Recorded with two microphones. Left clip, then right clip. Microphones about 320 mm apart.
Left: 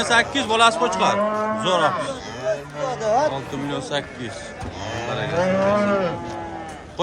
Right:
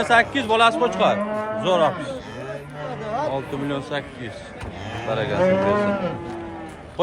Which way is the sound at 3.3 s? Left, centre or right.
Centre.